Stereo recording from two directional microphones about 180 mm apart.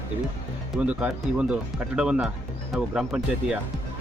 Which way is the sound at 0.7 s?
10° right (ahead or behind).